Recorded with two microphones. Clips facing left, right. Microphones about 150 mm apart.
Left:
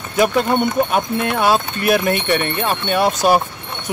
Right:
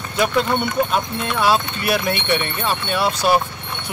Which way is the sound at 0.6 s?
50° left (ahead or behind).